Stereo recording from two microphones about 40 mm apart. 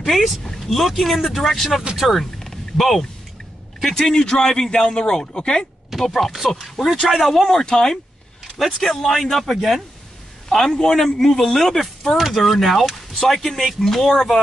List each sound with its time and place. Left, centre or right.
0.5 s speech: centre
3.8 s speech: centre
5.9 s speech: centre
7.5 s speech: centre
10.5 s speech: centre